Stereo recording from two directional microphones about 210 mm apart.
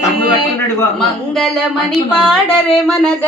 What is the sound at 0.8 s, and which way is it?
A man's voice, centre (ahead or behind).